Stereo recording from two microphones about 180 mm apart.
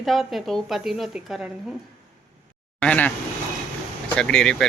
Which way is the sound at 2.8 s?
10° left (ahead or behind).